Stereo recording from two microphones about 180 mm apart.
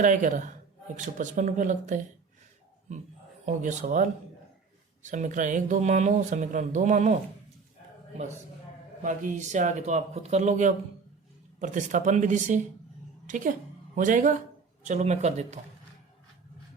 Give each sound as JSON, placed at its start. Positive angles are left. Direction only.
{"t": 0.0, "sound": "speech", "side_deg": -45}
{"t": 3.4, "sound": "speech", "side_deg": -45}
{"t": 5.0, "sound": "speech", "side_deg": -45}
{"t": 9.0, "sound": "a woman's voice", "side_deg": -45}